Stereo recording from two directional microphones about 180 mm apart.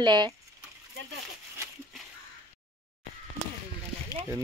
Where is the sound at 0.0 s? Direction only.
25° right (ahead or behind).